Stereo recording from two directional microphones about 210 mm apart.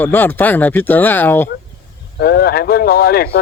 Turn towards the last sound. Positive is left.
turn(degrees=45)  # may be behind; listen again after turning